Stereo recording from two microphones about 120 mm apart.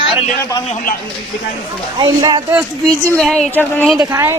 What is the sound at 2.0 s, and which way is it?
Speech, 35° right (ahead or behind).